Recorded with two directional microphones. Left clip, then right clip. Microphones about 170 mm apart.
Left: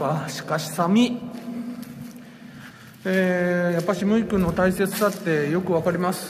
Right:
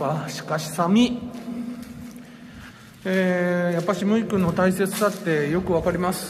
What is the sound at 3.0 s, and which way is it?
Speech, 5° left (ahead or behind).